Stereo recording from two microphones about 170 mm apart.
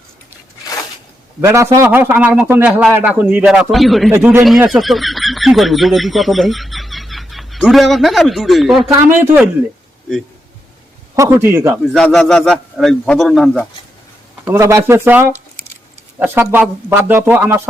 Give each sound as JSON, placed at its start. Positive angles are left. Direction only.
{"t": 0.6, "sound": "a sound", "side_deg": 20}
{"t": 1.4, "sound": "a man's voice", "side_deg": -15}
{"t": 4.1, "sound": "a man's voice", "side_deg": -10}
{"t": 4.7, "sound": "speech", "side_deg": 0}
{"t": 8.9, "sound": "a man's voice", "side_deg": -15}
{"t": 11.1, "sound": "a man's voice", "side_deg": -15}
{"t": 11.9, "sound": "a man's voice", "side_deg": 5}
{"t": 14.4, "sound": "a man's voice", "side_deg": -15}